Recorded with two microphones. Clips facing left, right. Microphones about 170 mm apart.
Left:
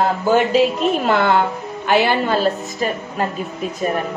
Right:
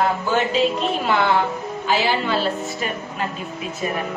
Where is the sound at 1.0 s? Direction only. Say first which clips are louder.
Left 2 dB; 50° left (ahead or behind).